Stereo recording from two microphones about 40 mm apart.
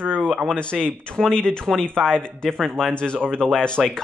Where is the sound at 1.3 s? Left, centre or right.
Left.